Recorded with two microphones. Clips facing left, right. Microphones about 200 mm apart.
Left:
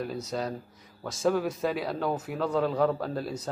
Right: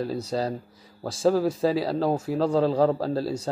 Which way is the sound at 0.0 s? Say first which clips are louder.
Right 5 dB; 30° right (ahead or behind).